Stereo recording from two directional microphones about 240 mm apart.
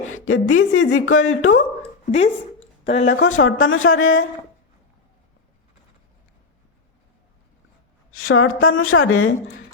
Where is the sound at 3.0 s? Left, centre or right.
Left.